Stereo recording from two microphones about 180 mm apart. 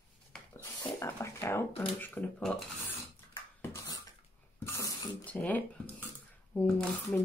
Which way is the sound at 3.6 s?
15° left (ahead or behind).